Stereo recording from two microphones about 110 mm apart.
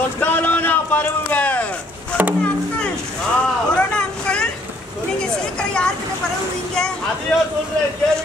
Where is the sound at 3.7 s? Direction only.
10° left (ahead or behind).